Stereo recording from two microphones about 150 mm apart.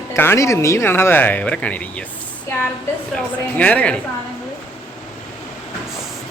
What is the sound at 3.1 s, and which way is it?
Speech, 10° left (ahead or behind).